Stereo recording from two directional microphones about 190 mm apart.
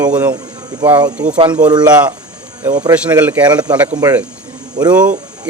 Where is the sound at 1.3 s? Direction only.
25° right (ahead or behind).